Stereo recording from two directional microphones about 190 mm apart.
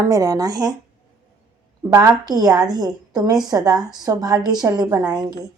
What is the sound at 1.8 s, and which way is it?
A woman's voice, 15° right (ahead or behind).